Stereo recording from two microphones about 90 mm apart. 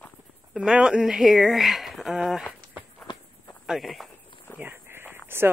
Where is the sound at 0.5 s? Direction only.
10° right (ahead or behind).